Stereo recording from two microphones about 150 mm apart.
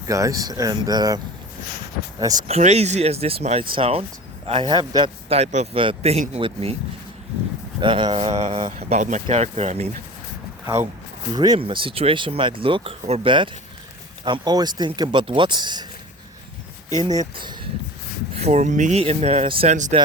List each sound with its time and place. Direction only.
0.1 s speech: 20° right (ahead or behind)
2.5 s speech: 45° right (ahead or behind)
7.8 s speech: 35° right (ahead or behind)
8.3 s speech: 50° right (ahead or behind)
8.5 s speech: 35° right (ahead or behind)
9.0 s speech: 55° right (ahead or behind)
11.3 s speech: 30° right (ahead or behind)
17.3 s speech: 30° right (ahead or behind)
18.3 s speech: 45° right (ahead or behind)
19.7 s speech: 55° right (ahead or behind)